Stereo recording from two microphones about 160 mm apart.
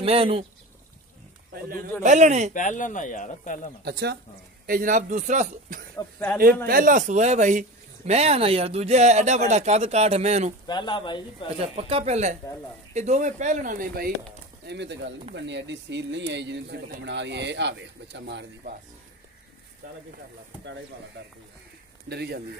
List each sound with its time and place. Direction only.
0.0 s speech: 35° right (ahead or behind)
1.5 s speech: 70° right (ahead or behind)
2.0 s speech: 50° right (ahead or behind)
2.5 s speech: 50° left (ahead or behind)
3.8 s speech: 90° right
4.6 s speech: 60° right (ahead or behind)
5.9 s speech: 15° left (ahead or behind)
6.4 s speech: 65° right (ahead or behind); by 10.5 s 45° right (ahead or behind)
10.7 s speech: 30° left (ahead or behind)
11.6 s speech: 40° right (ahead or behind); by 14.1 s 60° right (ahead or behind)
14.7 s speech: 90° right
22.1 s speech: 90° right